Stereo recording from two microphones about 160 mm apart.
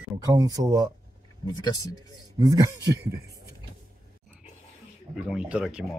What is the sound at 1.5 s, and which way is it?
Speech, 25° left (ahead or behind).